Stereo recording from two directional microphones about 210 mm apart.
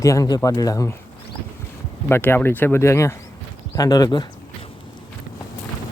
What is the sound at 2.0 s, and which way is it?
Speech, 10° left (ahead or behind).